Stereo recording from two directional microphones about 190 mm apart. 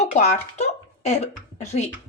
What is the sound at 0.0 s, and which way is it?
A woman's voice, 35° left (ahead or behind).